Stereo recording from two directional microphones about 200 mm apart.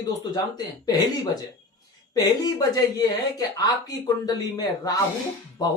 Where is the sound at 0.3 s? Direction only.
20° left (ahead or behind).